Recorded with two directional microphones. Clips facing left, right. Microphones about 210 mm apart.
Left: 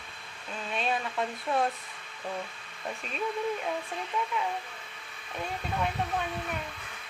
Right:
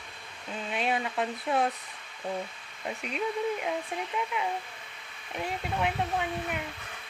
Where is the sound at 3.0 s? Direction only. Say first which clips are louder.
Right 3 dB; 20° right (ahead or behind).